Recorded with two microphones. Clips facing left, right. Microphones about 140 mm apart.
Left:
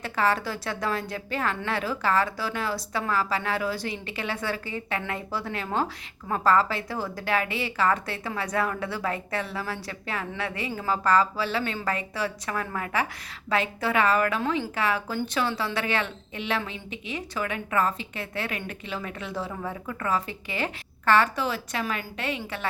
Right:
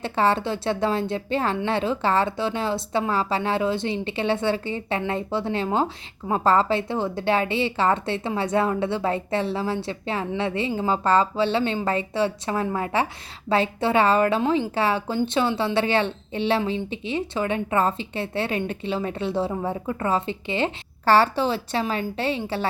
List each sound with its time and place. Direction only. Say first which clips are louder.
0.0 s a woman's voice: right 4 dB; 30° right (ahead or behind)